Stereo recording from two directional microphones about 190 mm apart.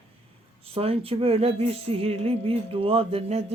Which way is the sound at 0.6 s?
30° right (ahead or behind).